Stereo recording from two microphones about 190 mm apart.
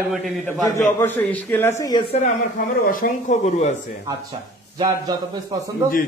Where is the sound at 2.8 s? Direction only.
45° left (ahead or behind).